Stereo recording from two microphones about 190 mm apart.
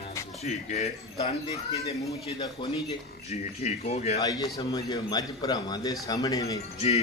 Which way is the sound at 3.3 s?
35° left (ahead or behind).